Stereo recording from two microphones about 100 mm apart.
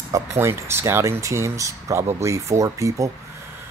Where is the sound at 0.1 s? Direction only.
30° right (ahead or behind).